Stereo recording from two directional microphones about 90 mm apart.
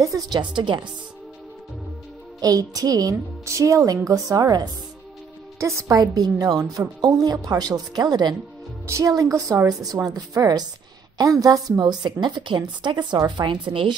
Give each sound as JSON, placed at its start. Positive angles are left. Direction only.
{"t": 0.0, "sound": "a woman's voice", "side_deg": -40}
{"t": 0.4, "sound": "speech", "side_deg": -60}
{"t": 2.4, "sound": "a woman's voice", "side_deg": -40}
{"t": 8.8, "sound": "a woman's voice", "side_deg": -35}
{"t": 9.3, "sound": "a woman's voice", "side_deg": -30}
{"t": 10.0, "sound": "a woman's voice", "side_deg": -40}